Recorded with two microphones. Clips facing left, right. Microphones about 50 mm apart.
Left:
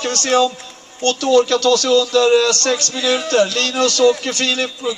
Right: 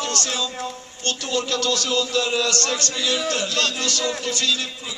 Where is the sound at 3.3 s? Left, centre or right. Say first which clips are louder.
Left 7 dB; left.